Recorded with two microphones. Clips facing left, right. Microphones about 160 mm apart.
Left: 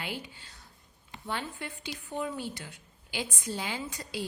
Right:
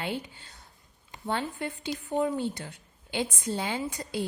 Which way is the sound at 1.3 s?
25° right (ahead or behind).